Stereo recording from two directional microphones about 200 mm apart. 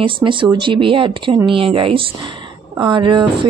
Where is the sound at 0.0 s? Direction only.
25° right (ahead or behind).